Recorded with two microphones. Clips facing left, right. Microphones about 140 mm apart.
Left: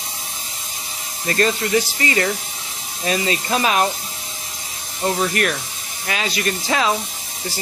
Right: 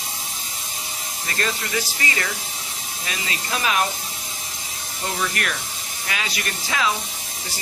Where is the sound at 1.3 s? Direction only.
35° left (ahead or behind).